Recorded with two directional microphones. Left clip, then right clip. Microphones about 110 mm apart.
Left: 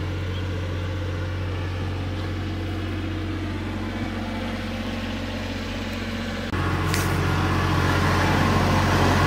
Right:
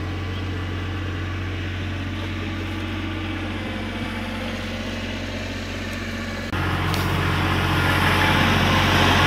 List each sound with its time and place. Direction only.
7.3 s vehicle: 15° right (ahead or behind)